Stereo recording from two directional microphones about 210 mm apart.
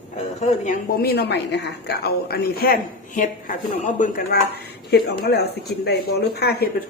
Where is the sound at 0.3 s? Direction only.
35° left (ahead or behind).